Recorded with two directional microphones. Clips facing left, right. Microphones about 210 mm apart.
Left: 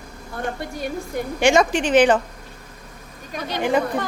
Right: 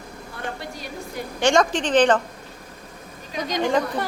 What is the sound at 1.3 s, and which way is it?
Speech, 10° left (ahead or behind).